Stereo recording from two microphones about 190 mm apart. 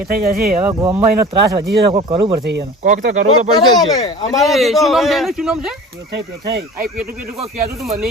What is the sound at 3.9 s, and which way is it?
Speech, 20° left (ahead or behind).